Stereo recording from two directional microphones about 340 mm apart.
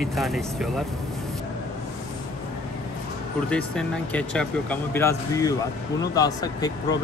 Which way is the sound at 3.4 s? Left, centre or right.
Centre.